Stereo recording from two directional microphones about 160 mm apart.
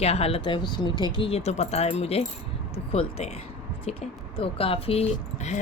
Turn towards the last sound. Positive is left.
turn(degrees=40)  # may be behind; listen again after turning